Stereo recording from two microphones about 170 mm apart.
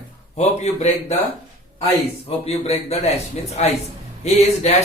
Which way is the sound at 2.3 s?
35° left (ahead or behind).